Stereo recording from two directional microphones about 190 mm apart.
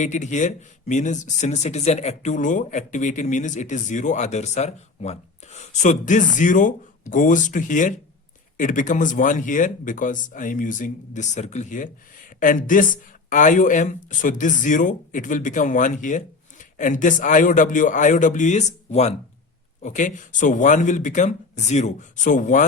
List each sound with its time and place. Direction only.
0.0 s speech: 40° left (ahead or behind)